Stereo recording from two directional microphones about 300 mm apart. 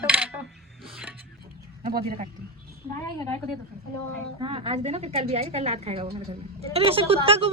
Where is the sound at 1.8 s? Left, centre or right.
Right.